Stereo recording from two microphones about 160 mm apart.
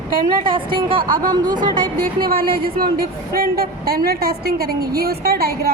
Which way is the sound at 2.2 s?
70° right (ahead or behind).